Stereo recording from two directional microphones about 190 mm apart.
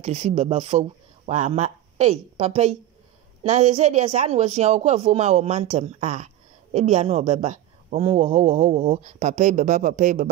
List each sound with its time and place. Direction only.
0.0 s speech: 35° right (ahead or behind)